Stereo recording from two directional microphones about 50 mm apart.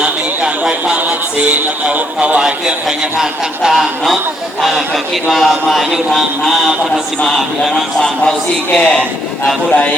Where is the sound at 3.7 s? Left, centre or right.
Centre.